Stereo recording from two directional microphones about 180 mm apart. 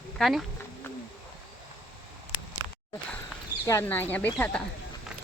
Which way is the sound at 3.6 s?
15° left (ahead or behind).